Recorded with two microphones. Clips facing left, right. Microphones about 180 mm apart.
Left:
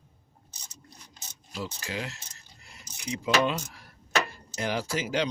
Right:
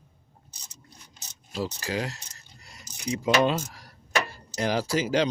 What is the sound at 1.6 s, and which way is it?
Speech, 40° right (ahead or behind).